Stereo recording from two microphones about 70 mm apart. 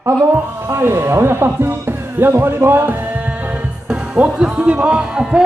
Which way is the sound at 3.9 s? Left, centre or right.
Centre.